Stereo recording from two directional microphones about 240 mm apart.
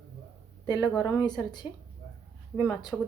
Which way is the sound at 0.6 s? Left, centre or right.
Centre.